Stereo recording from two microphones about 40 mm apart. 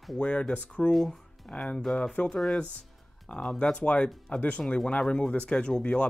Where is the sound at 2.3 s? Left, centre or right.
Centre.